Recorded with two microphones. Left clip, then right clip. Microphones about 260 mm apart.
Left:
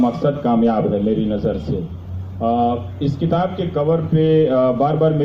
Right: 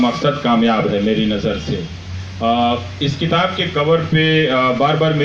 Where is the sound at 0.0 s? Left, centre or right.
Right.